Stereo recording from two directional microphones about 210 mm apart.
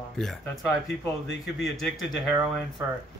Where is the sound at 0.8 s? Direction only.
60° left (ahead or behind).